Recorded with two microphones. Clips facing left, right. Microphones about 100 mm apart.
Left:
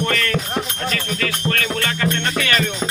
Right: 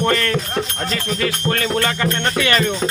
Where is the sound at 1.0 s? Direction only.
25° right (ahead or behind).